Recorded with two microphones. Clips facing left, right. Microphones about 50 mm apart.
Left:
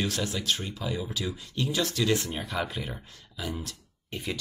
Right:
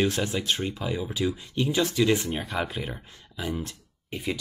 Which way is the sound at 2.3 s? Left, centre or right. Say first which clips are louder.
Right 2 dB; centre.